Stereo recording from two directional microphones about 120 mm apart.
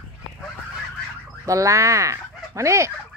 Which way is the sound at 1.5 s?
25° right (ahead or behind).